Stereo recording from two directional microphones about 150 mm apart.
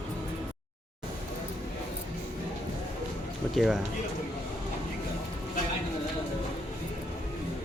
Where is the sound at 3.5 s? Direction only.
Centre (ahead or behind).